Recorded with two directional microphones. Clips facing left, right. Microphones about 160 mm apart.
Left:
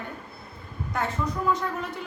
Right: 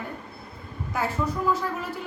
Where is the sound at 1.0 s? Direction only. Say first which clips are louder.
Right 1 dB; 5° right (ahead or behind).